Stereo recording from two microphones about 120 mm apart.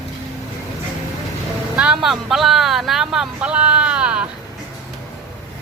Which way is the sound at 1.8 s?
5° right (ahead or behind).